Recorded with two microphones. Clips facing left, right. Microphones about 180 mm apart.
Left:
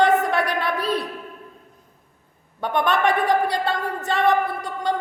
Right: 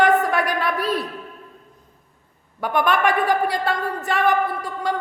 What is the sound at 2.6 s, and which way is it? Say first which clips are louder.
A woman's voice: right 1 dB; 25° left (ahead or behind).